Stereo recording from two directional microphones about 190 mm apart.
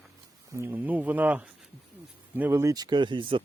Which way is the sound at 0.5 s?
10° right (ahead or behind).